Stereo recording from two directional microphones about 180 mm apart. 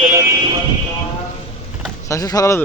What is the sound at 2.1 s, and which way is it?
Speech, 20° left (ahead or behind).